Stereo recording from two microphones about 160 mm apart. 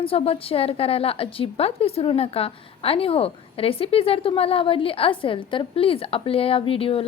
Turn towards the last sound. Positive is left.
turn(degrees=35)  # may be behind; listen again after turning